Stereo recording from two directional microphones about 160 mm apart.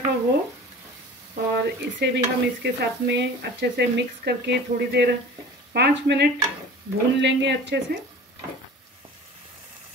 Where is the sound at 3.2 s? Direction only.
90° right.